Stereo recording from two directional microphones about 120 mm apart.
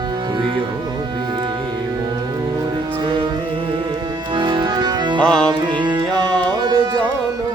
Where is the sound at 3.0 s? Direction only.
45° right (ahead or behind).